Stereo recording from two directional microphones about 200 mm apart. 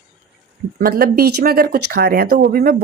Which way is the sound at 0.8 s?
50° right (ahead or behind).